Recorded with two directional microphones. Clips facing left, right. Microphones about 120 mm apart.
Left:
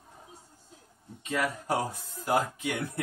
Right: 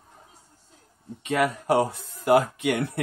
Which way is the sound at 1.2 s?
70° right (ahead or behind).